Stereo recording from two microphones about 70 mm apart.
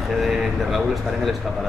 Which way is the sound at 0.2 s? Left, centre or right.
Centre.